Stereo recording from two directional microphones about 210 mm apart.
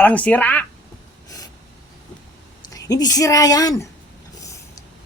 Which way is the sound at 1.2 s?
15° left (ahead or behind).